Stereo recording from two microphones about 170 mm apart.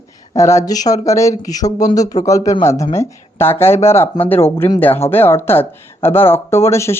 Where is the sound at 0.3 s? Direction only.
15° left (ahead or behind).